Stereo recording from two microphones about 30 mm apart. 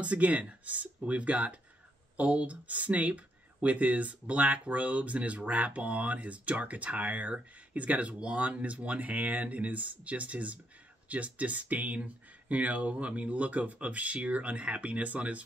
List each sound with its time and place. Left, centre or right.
0.0 s speech: right
8.1 s speech: right